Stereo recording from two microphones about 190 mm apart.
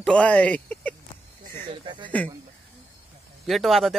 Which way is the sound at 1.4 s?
40° right (ahead or behind).